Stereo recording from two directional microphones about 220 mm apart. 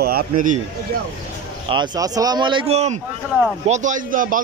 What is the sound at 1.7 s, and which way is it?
A man's voice, 20° right (ahead or behind).